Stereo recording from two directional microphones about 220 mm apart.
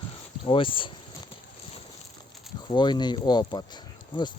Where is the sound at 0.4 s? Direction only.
25° left (ahead or behind).